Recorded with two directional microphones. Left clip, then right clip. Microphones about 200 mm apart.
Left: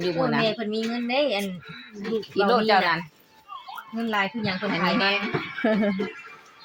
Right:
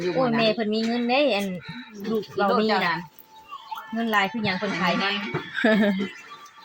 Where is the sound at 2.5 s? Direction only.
60° left (ahead or behind).